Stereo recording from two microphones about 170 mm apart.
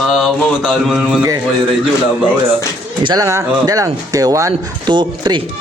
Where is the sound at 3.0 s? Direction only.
20° right (ahead or behind).